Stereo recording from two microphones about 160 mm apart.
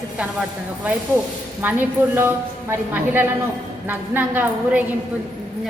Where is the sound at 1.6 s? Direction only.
10° right (ahead or behind).